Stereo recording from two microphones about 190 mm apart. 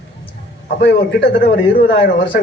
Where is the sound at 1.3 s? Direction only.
45° left (ahead or behind).